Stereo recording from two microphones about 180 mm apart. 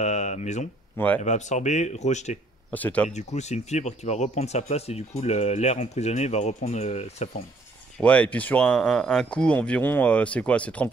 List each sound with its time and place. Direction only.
0.0 s speech: 40° left (ahead or behind)
0.9 s speech: 10° left (ahead or behind)
1.2 s speech: 40° left (ahead or behind)
2.7 s speech: 10° left (ahead or behind)
3.1 s speech: 40° left (ahead or behind)
8.0 s speech: 5° left (ahead or behind)